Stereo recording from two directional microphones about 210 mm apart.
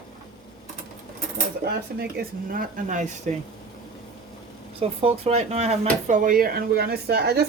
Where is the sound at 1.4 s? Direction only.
50° right (ahead or behind).